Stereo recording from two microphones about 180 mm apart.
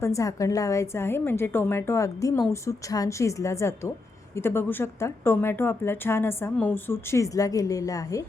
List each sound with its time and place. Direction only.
0.0 s speech: 15° left (ahead or behind)